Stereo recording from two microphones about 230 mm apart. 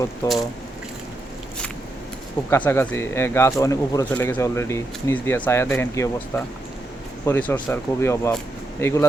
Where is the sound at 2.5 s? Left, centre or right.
Centre.